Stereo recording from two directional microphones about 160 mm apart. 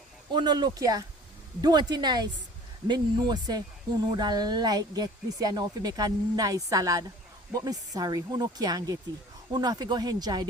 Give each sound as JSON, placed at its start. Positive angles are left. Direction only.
{"t": 0.3, "sound": "speech", "side_deg": -30}